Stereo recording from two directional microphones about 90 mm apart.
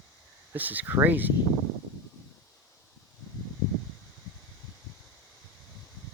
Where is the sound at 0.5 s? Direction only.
20° right (ahead or behind).